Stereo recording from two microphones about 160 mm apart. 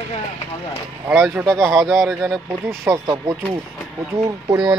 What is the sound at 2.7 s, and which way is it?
Speech, 15° right (ahead or behind).